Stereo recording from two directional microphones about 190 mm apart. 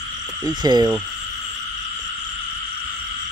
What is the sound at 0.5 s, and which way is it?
Speech, 20° right (ahead or behind).